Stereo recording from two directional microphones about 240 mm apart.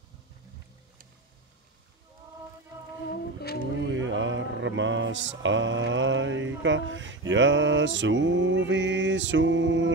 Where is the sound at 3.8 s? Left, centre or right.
Right.